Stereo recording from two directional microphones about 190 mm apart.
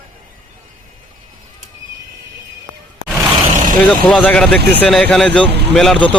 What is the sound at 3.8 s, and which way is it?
A man's voice, 5° left (ahead or behind).